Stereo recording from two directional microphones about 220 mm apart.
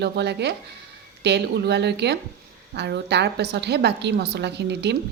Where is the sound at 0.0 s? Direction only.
50° right (ahead or behind).